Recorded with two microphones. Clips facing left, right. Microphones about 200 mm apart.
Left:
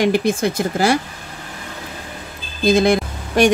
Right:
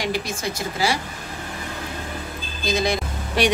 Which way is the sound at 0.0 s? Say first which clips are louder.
Left 10 dB; 55° left (ahead or behind).